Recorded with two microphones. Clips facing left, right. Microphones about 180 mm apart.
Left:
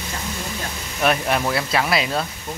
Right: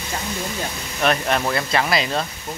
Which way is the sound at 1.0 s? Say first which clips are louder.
Even; 5° left (ahead or behind).